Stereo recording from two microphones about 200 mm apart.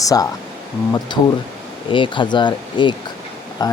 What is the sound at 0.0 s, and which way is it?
Speech, 15° left (ahead or behind).